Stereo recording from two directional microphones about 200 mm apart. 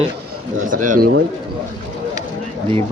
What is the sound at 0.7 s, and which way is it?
Speech, 40° right (ahead or behind).